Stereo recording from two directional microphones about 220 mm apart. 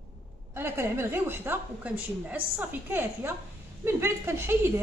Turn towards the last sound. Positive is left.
turn(degrees=-10)  # may be behind; listen again after turning